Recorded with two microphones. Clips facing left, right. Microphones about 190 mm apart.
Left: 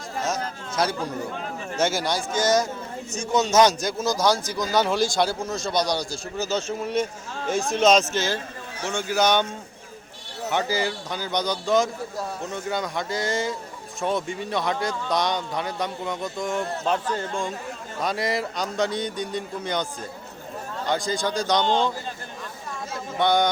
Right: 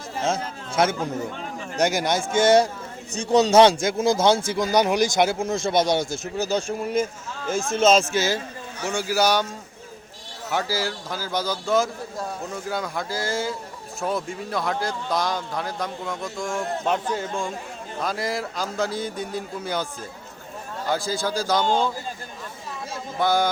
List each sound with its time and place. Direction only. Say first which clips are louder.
0.2 s a man's voice: right 2 dB; 25° right (ahead or behind); by 9.5 s 5° right (ahead or behind)
10.5 s speech: left 1 dB; 5° right (ahead or behind)
23.1 s speech: left 1 dB; 5° right (ahead or behind)